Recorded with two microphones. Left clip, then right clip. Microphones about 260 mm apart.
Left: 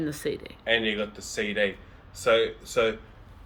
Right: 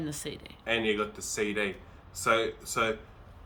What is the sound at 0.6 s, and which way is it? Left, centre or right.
Speech, right.